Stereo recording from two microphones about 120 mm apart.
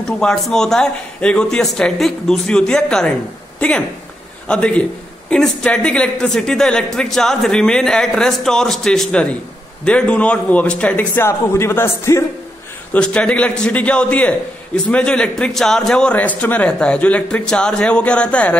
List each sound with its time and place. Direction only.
0.2 s a man's voice: 5° left (ahead or behind); by 12.3 s 25° left (ahead or behind)
12.9 s a man's voice: 10° left (ahead or behind)